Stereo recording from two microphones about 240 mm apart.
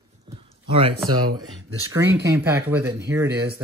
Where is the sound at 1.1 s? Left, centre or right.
Right.